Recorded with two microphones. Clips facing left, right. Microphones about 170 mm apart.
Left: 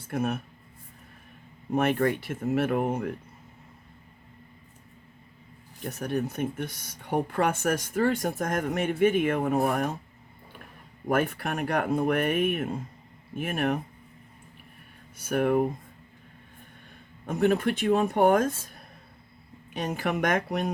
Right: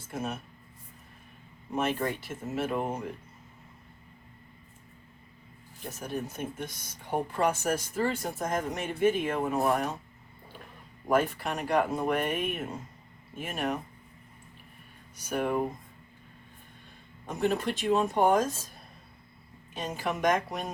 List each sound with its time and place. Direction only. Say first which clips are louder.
0.1 s speech: left 6 dB; 60° left (ahead or behind)
1.7 s speech: left 5 dB; 60° left (ahead or behind)
5.9 s speech: left 6 dB; 65° left (ahead or behind)
11.1 s speech: even; 55° left (ahead or behind)
15.3 s speech: left 5 dB; 55° left (ahead or behind)
17.2 s speech: left 5 dB; 60° left (ahead or behind)
19.7 s speech: left 4 dB; 60° left (ahead or behind)